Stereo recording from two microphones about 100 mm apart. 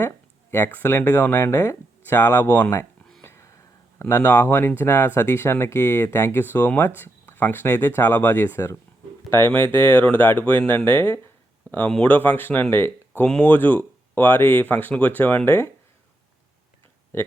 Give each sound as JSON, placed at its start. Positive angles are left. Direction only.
{"t": 0.5, "sound": "speech", "side_deg": 20}
{"t": 3.2, "sound": "a sound", "side_deg": 30}
{"t": 3.9, "sound": "speech", "side_deg": 20}